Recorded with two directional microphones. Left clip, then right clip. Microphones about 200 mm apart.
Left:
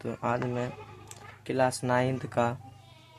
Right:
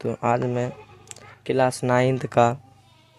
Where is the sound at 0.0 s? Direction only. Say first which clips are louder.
Right 8 dB; 40° right (ahead or behind).